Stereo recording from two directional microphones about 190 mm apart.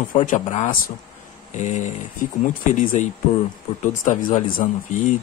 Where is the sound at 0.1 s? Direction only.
40° left (ahead or behind).